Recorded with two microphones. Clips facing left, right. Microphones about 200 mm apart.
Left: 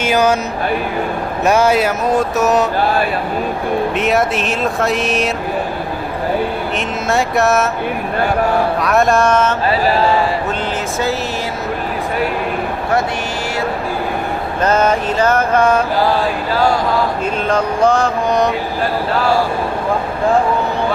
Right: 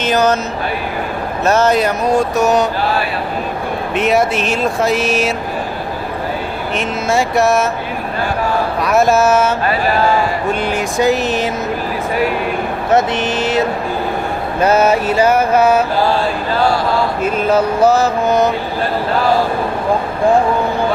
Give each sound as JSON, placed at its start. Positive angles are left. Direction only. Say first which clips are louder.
{"t": 0.0, "sound": "speech", "louder": "even", "side_deg": 10}
{"t": 1.5, "sound": "speech", "louder": "even", "side_deg": 10}
{"t": 3.9, "sound": "speech", "louder": "right 1 dB", "side_deg": 0}
{"t": 6.7, "sound": "speech", "louder": "right 3 dB", "side_deg": 0}
{"t": 8.8, "sound": "speech", "louder": "right 4 dB", "side_deg": 0}
{"t": 10.9, "sound": "mantra", "louder": "right 8 dB", "side_deg": -15}
{"t": 12.9, "sound": "speech", "louder": "right 5 dB", "side_deg": -20}
{"t": 14.6, "sound": "mantra", "louder": "right 2 dB", "side_deg": -10}
{"t": 17.2, "sound": "speech", "louder": "right 3 dB", "side_deg": -5}